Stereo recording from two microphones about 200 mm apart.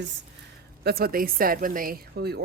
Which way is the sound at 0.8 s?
50° right (ahead or behind).